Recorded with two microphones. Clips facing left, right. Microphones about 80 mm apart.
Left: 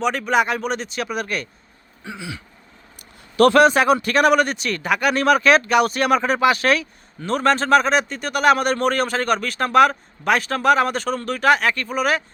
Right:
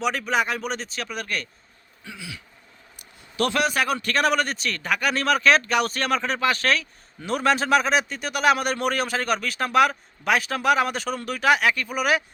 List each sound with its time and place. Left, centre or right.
0.0 s a man's voice: centre
2.0 s a man's voice: left
3.3 s a man's voice: left
3.7 s a man's voice: left
4.2 s a man's voice: centre
7.2 s a man's voice: centre